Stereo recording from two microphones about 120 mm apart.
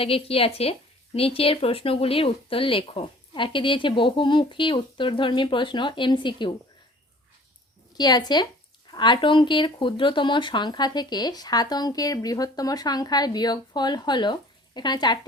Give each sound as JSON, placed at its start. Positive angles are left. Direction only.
{"t": 0.0, "sound": "speech", "side_deg": 50}
{"t": 7.9, "sound": "speech", "side_deg": 35}